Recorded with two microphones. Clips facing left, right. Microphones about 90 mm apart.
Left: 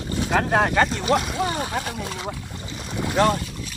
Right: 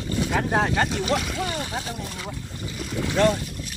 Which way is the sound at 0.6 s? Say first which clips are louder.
Left 3 dB; 45° left (ahead or behind).